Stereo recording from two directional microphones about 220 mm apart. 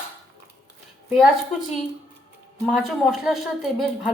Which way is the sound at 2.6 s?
Centre (ahead or behind).